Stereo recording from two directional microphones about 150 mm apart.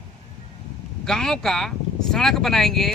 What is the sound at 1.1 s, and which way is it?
Speech, 5° left (ahead or behind).